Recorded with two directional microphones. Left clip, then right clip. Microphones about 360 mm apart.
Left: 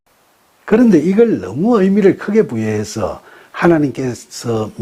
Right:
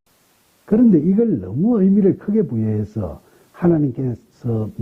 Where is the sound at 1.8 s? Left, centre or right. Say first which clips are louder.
Left 6 dB; centre.